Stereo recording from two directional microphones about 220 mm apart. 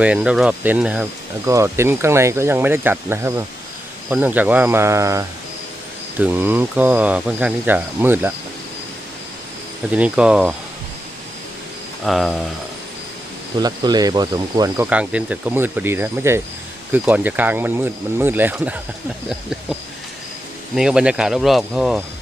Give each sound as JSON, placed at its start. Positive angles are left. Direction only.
{"t": 0.0, "sound": "speech", "side_deg": -5}
{"t": 9.9, "sound": "speech", "side_deg": -5}
{"t": 12.0, "sound": "speech", "side_deg": 0}
{"t": 13.6, "sound": "speech", "side_deg": -20}
{"t": 14.8, "sound": "speech", "side_deg": -5}
{"t": 20.7, "sound": "speech", "side_deg": -5}